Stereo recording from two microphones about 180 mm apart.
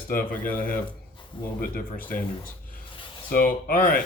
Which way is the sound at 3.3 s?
55° left (ahead or behind).